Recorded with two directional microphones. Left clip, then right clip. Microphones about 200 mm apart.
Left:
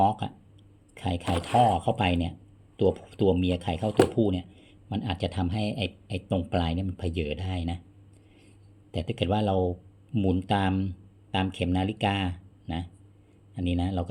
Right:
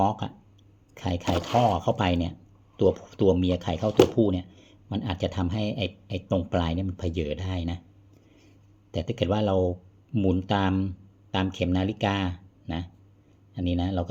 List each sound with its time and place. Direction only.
0.0 s speech: 25° left (ahead or behind)
8.9 s speech: 25° left (ahead or behind)